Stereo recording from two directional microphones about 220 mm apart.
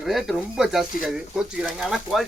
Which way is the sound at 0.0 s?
Centre (ahead or behind).